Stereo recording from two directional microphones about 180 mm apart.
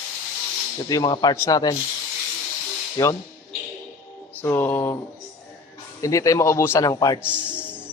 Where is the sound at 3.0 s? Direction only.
20° left (ahead or behind).